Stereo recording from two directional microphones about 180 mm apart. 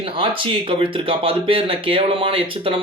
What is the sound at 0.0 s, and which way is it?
Speech, 30° right (ahead or behind).